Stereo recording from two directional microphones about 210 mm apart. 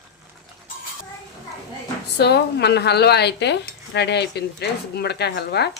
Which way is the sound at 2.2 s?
50° left (ahead or behind).